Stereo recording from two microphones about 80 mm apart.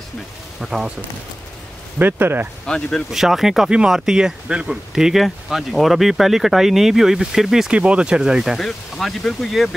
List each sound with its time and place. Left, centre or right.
0.6 s speech: centre
2.0 s speech: right
2.6 s speech: centre
3.1 s speech: centre
8.5 s speech: centre